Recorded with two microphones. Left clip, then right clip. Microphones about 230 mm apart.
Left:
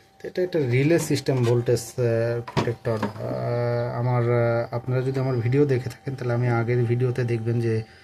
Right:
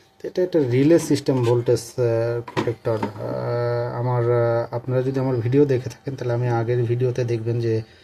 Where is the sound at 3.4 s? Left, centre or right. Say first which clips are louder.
Right 2 dB; centre.